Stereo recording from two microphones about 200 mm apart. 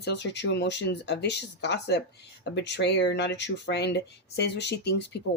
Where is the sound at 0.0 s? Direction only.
60° left (ahead or behind).